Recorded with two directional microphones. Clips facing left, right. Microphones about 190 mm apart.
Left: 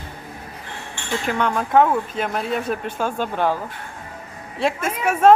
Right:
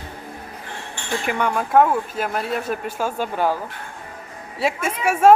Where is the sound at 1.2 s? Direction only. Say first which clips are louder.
Even; 10° right (ahead or behind).